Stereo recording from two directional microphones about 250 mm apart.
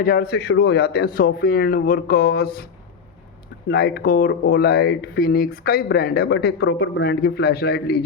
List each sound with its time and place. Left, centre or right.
0.0 s speech: left
3.7 s speech: left